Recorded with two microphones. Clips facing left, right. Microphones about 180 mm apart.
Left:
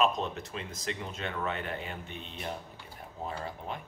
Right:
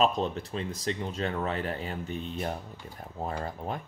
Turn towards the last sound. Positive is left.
turn(degrees=-45)  # may be behind; listen again after turning